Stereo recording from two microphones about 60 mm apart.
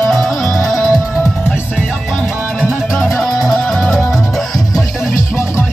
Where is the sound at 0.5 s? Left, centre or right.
Left.